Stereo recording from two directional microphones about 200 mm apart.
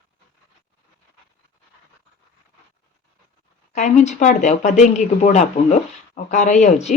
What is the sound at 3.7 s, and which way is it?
Speech, 35° left (ahead or behind).